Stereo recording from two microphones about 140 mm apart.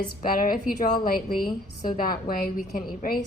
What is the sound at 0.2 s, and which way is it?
Speech, 90° left.